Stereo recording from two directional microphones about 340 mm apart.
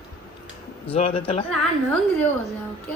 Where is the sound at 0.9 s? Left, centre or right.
Centre.